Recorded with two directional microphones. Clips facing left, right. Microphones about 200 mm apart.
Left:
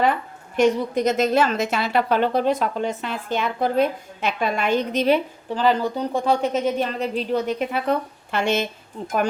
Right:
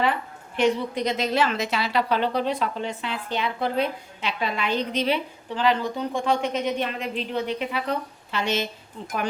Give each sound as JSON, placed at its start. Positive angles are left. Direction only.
{"t": 0.0, "sound": "a woman's voice", "side_deg": 45}